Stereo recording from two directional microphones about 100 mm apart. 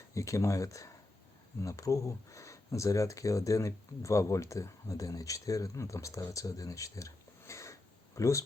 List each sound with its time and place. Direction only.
0.1 s speech: 30° left (ahead or behind)